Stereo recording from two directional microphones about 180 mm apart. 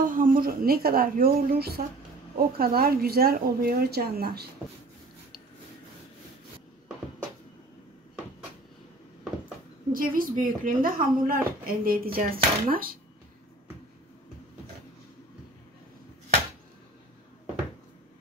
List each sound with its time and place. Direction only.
0.0 s a woman's voice: 50° right (ahead or behind)
9.9 s a woman's voice: 50° right (ahead or behind)